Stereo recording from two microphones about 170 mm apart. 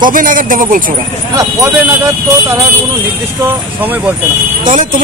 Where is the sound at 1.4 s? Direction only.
15° right (ahead or behind).